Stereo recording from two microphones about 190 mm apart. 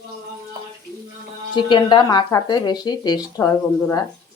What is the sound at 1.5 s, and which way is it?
A woman's voice, 25° left (ahead or behind).